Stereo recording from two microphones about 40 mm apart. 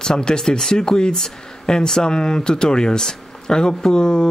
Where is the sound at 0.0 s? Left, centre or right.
Centre.